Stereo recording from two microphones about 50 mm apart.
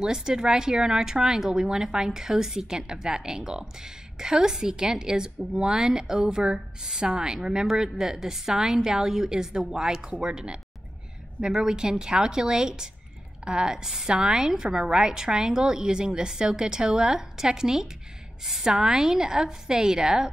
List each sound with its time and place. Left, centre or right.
0.0 s speech: centre